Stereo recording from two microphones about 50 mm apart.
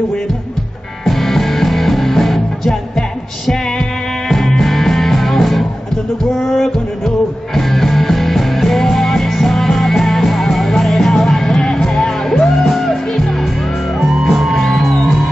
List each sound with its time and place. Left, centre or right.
1.0 s music: centre
4.3 s music: centre
13.9 s music: centre